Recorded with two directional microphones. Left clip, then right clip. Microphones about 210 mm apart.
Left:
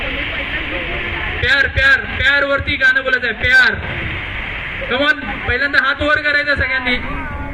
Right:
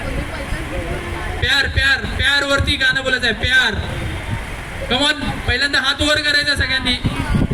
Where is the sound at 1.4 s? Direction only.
75° right (ahead or behind).